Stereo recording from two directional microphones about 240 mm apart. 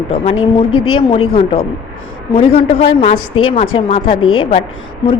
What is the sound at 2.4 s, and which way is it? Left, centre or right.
Speech, left.